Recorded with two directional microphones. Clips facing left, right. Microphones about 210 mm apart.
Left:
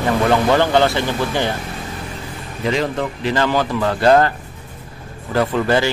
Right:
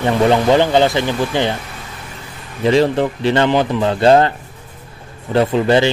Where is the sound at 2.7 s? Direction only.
30° right (ahead or behind).